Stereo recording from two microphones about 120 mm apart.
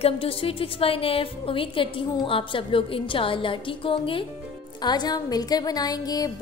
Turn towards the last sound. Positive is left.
turn(degrees=30)  # may be behind; listen again after turning